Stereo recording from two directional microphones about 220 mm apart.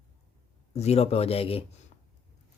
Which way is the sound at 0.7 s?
30° left (ahead or behind).